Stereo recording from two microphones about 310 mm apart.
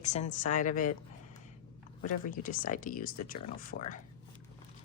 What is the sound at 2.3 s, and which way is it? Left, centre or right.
Speech, left.